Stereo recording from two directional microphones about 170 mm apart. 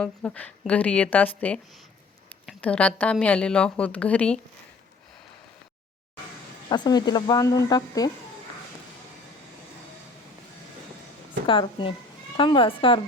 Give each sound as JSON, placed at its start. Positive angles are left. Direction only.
{"t": 0.0, "sound": "a woman's voice", "side_deg": 10}
{"t": 6.7, "sound": "speech", "side_deg": 25}
{"t": 11.4, "sound": "speech", "side_deg": 30}